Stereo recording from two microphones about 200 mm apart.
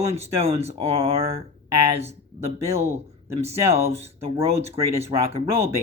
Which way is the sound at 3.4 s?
30° right (ahead or behind).